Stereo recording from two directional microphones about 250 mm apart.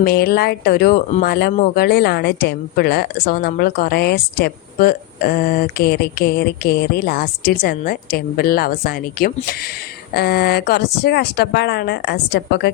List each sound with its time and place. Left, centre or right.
0.0 s a woman's voice: left